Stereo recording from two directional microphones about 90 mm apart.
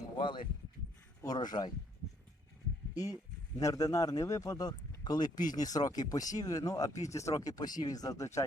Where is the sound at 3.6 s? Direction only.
40° left (ahead or behind).